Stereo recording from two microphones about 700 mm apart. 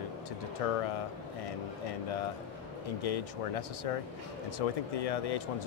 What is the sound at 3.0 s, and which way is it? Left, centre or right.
Speech, left.